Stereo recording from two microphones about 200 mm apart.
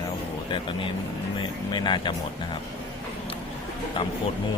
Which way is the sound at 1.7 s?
20° left (ahead or behind).